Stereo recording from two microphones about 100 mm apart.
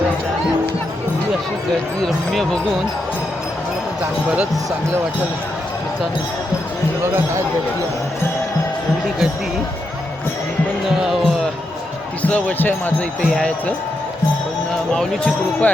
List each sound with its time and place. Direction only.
2.0 s speech: centre (ahead or behind)
7.0 s speech: 25° right (ahead or behind)
11.0 s music: centre (ahead or behind)
12.2 s speech: 15° left (ahead or behind)
14.9 s speech: 10° left (ahead or behind)